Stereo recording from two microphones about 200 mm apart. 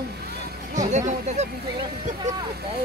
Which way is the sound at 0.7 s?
35° right (ahead or behind).